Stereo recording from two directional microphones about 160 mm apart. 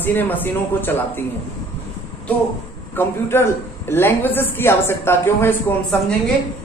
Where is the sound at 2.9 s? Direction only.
15° left (ahead or behind).